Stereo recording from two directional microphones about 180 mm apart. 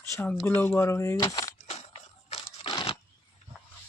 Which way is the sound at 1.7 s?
30° left (ahead or behind).